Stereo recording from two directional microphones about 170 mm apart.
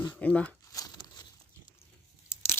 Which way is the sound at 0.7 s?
20° left (ahead or behind).